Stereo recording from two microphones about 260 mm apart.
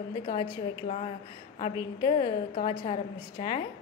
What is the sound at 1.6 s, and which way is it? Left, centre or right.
A woman's voice, centre.